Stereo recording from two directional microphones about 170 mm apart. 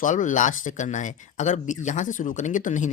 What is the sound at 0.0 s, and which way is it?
Speech, 45° left (ahead or behind).